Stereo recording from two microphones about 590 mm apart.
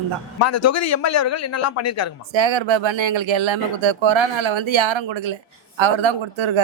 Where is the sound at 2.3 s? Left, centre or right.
Right.